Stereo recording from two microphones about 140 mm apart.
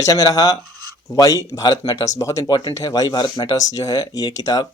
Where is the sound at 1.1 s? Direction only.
25° left (ahead or behind).